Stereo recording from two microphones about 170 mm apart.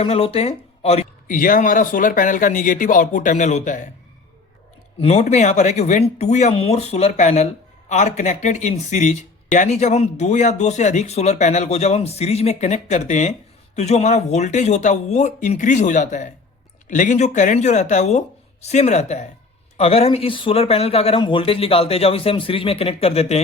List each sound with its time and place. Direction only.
0.0 s speech: 35° left (ahead or behind)
1.3 s speech: 55° left (ahead or behind)
4.9 s speech: 40° left (ahead or behind)